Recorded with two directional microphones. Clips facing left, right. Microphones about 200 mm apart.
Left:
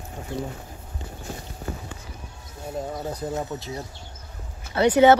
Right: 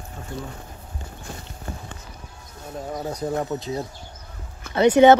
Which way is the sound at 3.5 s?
20° right (ahead or behind).